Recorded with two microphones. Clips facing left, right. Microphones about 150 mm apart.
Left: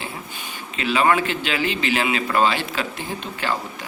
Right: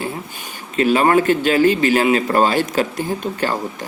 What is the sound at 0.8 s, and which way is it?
Speech, 45° right (ahead or behind).